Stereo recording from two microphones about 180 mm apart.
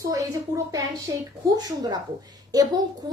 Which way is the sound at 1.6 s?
20° right (ahead or behind).